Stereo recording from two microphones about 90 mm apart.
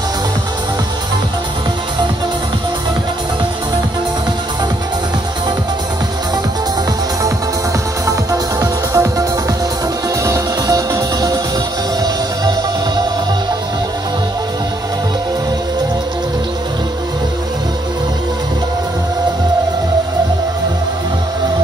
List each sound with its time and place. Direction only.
8.1 s music: 40° right (ahead or behind)
10.2 s music: 40° right (ahead or behind)